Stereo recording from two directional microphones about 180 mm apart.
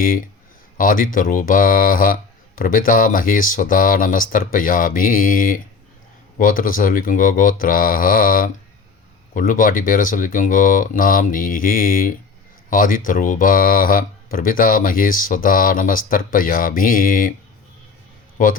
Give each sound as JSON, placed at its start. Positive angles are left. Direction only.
{"t": 0.0, "sound": "speech", "side_deg": 50}
{"t": 18.4, "sound": "speech", "side_deg": 45}